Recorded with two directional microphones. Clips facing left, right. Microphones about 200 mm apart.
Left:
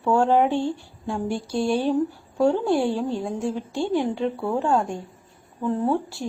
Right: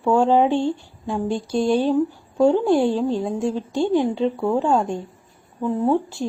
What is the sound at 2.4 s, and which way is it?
Speech, 15° right (ahead or behind).